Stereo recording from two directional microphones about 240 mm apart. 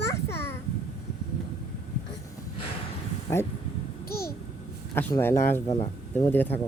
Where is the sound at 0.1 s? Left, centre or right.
Centre.